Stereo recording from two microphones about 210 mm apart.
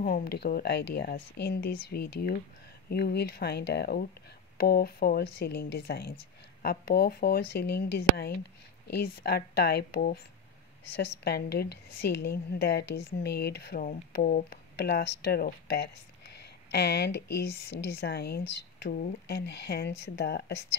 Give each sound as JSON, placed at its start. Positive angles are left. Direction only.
{"t": 0.0, "sound": "a woman's voice", "side_deg": 45}
{"t": 11.2, "sound": "a woman's voice", "side_deg": 50}